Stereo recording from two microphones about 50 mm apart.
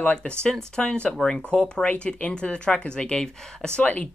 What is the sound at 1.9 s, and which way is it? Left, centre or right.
Speech, left.